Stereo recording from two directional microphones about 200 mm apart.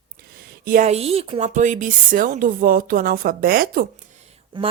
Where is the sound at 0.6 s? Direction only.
40° right (ahead or behind).